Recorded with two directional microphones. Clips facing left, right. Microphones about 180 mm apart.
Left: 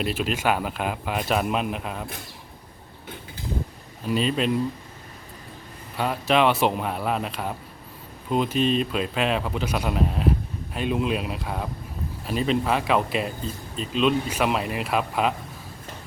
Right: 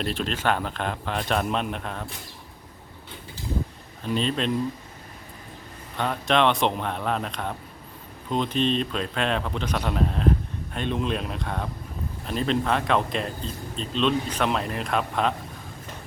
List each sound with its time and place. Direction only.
0.0 s speech: 5° left (ahead or behind)
4.0 s speech: 5° left (ahead or behind)
6.0 s speech: 5° left (ahead or behind)